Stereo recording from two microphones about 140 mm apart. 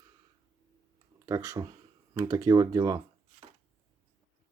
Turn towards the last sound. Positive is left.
turn(degrees=-30)  # may be behind; listen again after turning